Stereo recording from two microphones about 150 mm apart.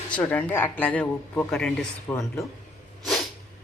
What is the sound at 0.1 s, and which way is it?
Speech, 10° left (ahead or behind).